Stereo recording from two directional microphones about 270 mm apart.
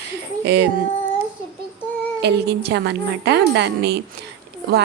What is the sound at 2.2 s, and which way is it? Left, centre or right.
Speech, right.